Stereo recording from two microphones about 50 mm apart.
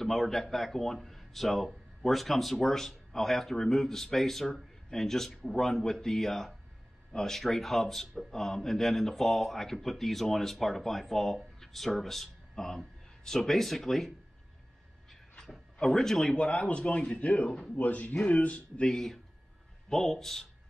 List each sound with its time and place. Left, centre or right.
0.0 s a man's voice: centre
15.4 s speech: centre
16.3 s speech: left
17.5 s speech: centre
17.7 s speech: left
18.9 s speech: centre